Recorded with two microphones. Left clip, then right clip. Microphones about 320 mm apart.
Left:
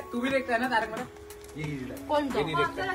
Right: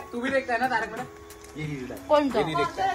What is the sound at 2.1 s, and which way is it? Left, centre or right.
Speech, centre.